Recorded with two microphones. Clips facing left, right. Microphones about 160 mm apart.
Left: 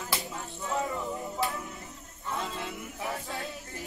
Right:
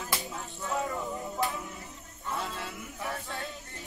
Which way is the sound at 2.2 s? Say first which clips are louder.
Even; 5° right (ahead or behind).